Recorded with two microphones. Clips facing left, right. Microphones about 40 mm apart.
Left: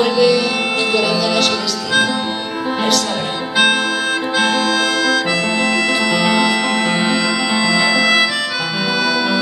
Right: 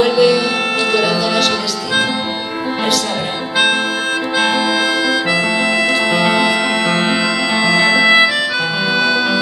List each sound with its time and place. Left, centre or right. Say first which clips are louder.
0.0 s music: right 1 dB; centre
6.0 s music: right 1 dB; centre
7.6 s music: right 4 dB; right